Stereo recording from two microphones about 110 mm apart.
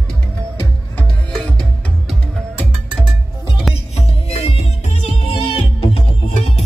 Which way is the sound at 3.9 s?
70° left (ahead or behind).